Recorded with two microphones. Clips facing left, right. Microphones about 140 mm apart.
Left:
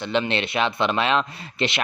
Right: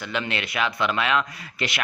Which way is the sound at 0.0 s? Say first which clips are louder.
Left 5 dB; 25° left (ahead or behind).